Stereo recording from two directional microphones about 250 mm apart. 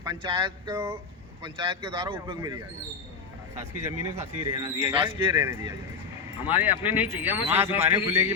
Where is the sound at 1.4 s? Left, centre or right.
Centre.